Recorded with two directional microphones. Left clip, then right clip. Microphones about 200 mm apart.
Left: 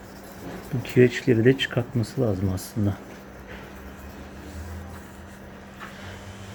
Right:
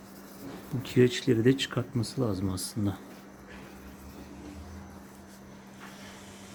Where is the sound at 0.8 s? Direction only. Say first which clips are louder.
Left 5 dB; 20° right (ahead or behind).